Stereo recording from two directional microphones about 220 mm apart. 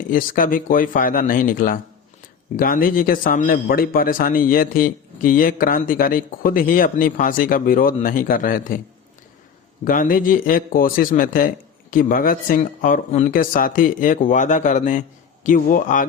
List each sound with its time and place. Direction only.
0.1 s a man's voice: 40° left (ahead or behind)
9.8 s a man's voice: 40° left (ahead or behind)